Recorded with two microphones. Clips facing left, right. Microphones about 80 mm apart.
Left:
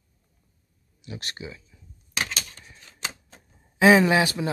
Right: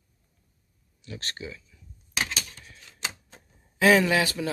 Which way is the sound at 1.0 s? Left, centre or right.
Centre.